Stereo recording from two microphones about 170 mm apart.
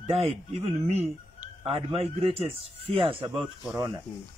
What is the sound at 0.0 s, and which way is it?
Speech, 35° right (ahead or behind).